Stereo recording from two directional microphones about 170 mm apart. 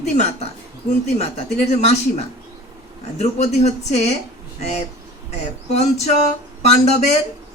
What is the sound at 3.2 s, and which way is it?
Speech, 40° left (ahead or behind).